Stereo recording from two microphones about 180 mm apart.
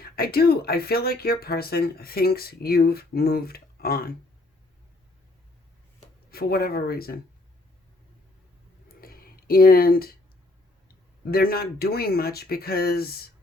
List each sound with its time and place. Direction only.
0.0 s speech: 55° left (ahead or behind)
6.3 s speech: 55° left (ahead or behind)
9.0 s a sound: 55° left (ahead or behind)
11.3 s speech: 55° left (ahead or behind)